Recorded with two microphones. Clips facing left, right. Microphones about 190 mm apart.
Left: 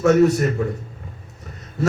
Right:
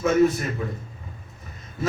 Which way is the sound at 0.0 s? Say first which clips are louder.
Left 4 dB; 75° left (ahead or behind).